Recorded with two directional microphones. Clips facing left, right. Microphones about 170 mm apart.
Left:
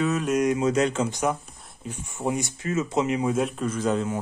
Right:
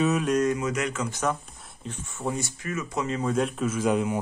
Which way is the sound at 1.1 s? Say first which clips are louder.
Left 2 dB; 10° left (ahead or behind).